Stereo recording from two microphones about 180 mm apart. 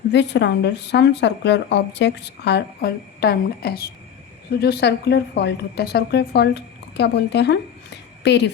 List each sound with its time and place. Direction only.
0.1 s a woman's voice: 75° left (ahead or behind)